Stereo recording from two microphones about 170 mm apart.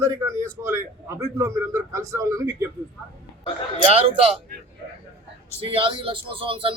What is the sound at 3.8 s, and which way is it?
Speech, 35° right (ahead or behind).